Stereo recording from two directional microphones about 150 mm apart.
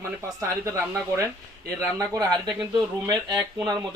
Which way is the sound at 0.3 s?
20° right (ahead or behind).